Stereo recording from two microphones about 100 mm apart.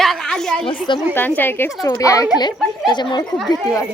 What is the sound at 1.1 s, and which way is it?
Speech, 20° left (ahead or behind).